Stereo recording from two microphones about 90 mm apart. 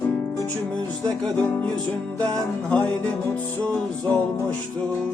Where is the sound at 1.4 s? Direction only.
20° left (ahead or behind).